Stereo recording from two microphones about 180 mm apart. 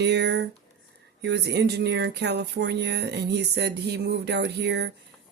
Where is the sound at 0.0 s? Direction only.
70° right (ahead or behind).